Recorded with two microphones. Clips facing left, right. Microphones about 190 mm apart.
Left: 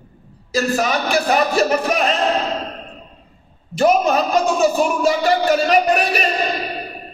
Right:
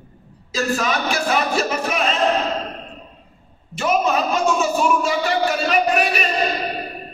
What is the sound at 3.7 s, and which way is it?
A man's voice, 35° left (ahead or behind).